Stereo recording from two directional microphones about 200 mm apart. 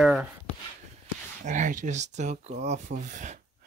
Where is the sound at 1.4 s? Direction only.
40° right (ahead or behind).